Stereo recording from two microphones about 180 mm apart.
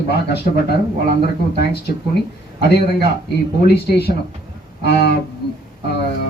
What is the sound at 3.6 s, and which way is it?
Speech, 65° left (ahead or behind).